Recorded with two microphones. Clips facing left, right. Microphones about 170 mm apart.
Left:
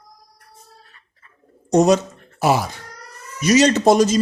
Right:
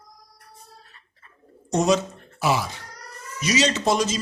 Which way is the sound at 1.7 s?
45° left (ahead or behind).